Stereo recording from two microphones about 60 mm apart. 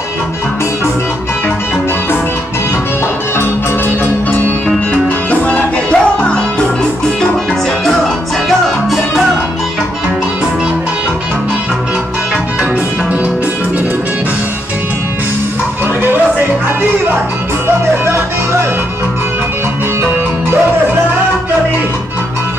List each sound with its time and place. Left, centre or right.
5.3 s music: left
8.5 s music: centre
17.6 s music: right